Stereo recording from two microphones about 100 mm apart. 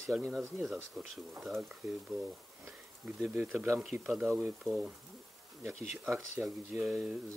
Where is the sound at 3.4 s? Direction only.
20° right (ahead or behind).